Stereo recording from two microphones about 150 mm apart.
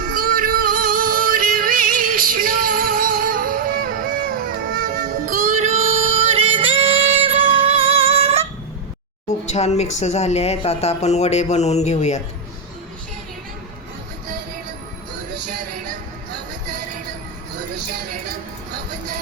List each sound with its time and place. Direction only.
0.0 s music: 70° right (ahead or behind)
5.5 s singing: 50° right (ahead or behind)
9.5 s speech: 45° left (ahead or behind)